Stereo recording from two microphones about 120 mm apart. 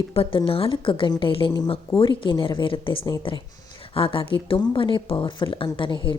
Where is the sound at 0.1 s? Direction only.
50° left (ahead or behind).